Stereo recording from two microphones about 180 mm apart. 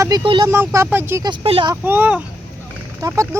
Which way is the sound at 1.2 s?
30° right (ahead or behind).